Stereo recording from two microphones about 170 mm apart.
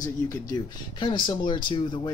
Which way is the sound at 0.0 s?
20° left (ahead or behind).